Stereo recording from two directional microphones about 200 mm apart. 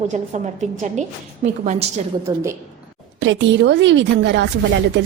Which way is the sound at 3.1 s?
65° right (ahead or behind).